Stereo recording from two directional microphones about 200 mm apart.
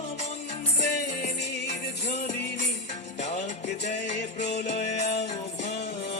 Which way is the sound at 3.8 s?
35° left (ahead or behind).